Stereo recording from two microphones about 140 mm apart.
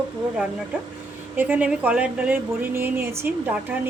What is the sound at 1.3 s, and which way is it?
Speech, 10° right (ahead or behind).